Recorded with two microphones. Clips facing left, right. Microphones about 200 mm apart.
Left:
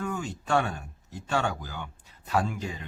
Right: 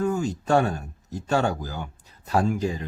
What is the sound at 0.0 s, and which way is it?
Speech, 40° right (ahead or behind).